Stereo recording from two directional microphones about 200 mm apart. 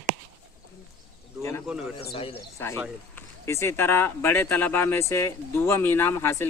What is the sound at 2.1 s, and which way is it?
Speech, 30° left (ahead or behind).